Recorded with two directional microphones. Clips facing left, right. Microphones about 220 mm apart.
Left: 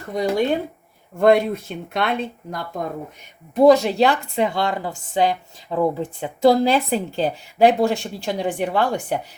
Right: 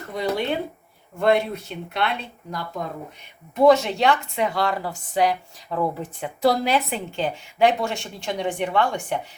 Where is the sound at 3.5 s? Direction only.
35° left (ahead or behind).